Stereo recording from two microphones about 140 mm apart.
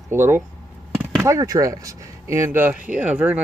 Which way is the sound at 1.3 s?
25° right (ahead or behind).